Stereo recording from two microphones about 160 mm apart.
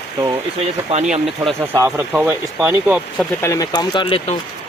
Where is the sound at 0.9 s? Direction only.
45° right (ahead or behind).